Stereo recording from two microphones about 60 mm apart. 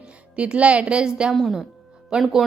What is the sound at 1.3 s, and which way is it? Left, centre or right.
Speech, centre.